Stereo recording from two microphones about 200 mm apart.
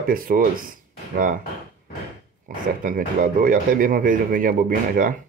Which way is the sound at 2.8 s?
45° right (ahead or behind).